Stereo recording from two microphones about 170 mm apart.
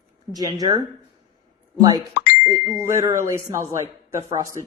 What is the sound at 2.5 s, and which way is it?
Speech, 15° right (ahead or behind).